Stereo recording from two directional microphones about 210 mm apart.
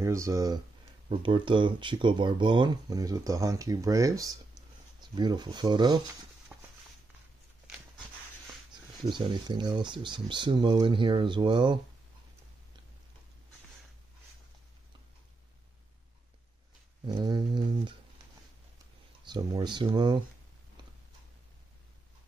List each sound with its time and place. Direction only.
0.0 s speech: 15° right (ahead or behind)
6.5 s walk: 5° right (ahead or behind)
9.0 s speech: 20° right (ahead or behind)
17.0 s a sound: 20° right (ahead or behind)
19.2 s speech: 20° right (ahead or behind)